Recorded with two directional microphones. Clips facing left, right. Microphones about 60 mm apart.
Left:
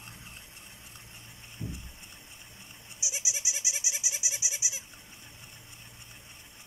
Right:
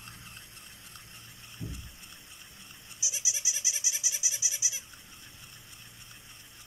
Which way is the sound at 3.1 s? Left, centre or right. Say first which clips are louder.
Left 2 dB; left.